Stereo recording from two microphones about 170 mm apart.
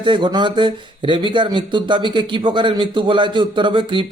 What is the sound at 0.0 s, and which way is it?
Speech, 30° right (ahead or behind).